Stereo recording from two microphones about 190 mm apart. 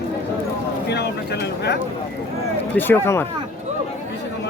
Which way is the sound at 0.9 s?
60° left (ahead or behind).